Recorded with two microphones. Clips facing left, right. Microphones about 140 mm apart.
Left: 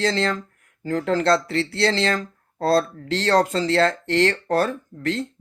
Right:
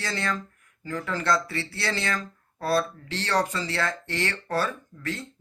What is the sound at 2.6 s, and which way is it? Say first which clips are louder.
Speech: left 6 dB; 85° left.